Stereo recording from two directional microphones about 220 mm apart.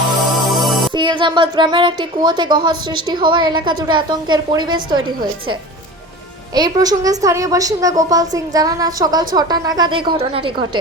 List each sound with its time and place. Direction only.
0.4 s music: centre (ahead or behind)
0.9 s a woman's voice: 20° right (ahead or behind)
6.5 s a woman's voice: 15° right (ahead or behind)